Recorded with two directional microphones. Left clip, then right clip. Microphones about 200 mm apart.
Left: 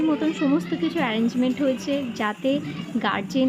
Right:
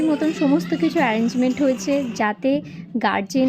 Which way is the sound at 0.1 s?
15° right (ahead or behind).